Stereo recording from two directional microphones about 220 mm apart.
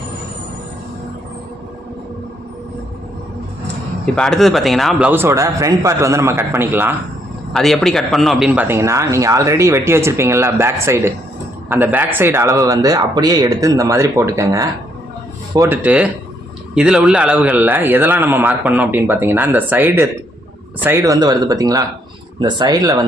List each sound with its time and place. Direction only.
4.0 s a man's voice: 5° left (ahead or behind)
7.5 s a man's voice: centre (ahead or behind); by 23.0 s 15° right (ahead or behind)